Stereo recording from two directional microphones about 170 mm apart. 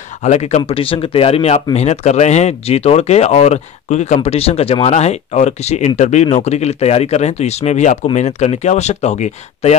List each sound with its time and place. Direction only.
0.2 s speech: 40° left (ahead or behind)